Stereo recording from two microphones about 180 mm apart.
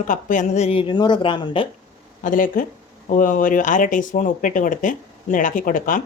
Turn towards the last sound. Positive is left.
turn(degrees=50)  # may be behind; listen again after turning